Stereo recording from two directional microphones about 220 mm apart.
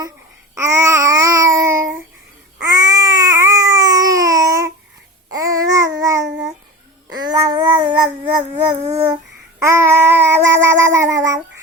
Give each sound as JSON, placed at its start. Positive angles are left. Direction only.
{"t": 0.5, "sound": "babbling", "side_deg": -10}